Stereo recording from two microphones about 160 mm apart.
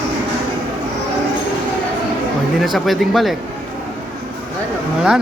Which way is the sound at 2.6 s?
Centre (ahead or behind).